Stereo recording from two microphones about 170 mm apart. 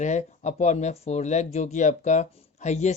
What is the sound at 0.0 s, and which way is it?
Speech, 45° left (ahead or behind).